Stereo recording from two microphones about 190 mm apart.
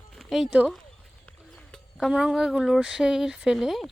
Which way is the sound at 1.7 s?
Centre (ahead or behind).